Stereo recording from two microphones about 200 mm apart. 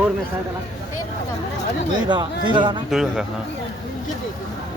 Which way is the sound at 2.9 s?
Centre (ahead or behind).